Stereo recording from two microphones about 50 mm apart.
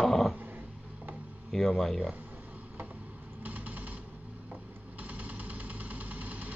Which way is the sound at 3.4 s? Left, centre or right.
Right.